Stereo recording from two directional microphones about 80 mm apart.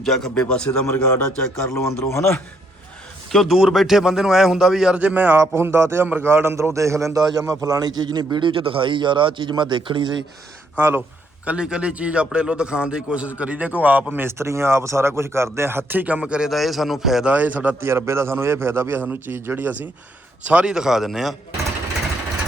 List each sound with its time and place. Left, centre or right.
0.0 s a man's voice: centre
1.6 s speech: left
3.3 s speech: centre
4.9 s a man's voice: centre
5.4 s a man's voice: right
10.8 s a man's voice: right
11.4 s a man's voice: centre
17.3 s a man's voice: right
20.5 s a man's voice: centre